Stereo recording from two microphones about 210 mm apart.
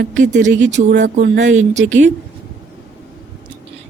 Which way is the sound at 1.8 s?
35° right (ahead or behind).